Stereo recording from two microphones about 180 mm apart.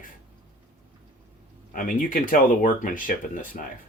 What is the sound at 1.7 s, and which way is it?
Speech, 50° left (ahead or behind).